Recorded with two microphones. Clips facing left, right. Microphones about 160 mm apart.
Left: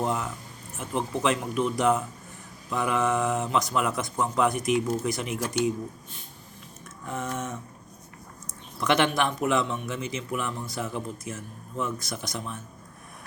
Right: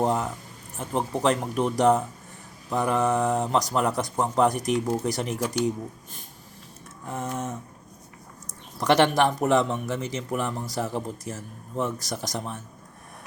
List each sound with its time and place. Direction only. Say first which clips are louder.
0.0 s speech: right 4 dB; 35° right (ahead or behind)
7.1 s speech: right 1 dB; 35° right (ahead or behind)
8.8 s speech: right 4 dB; 40° right (ahead or behind)